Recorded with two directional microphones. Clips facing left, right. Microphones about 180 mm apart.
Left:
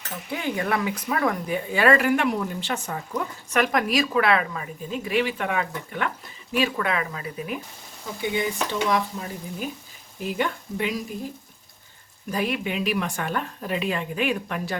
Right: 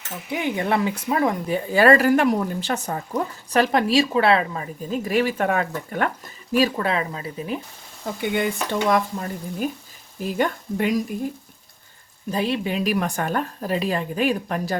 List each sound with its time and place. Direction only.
0.3 s speech: 15° right (ahead or behind)
8.2 s speech: 60° right (ahead or behind)
8.9 s speech: 45° right (ahead or behind)
12.3 s speech: 30° right (ahead or behind)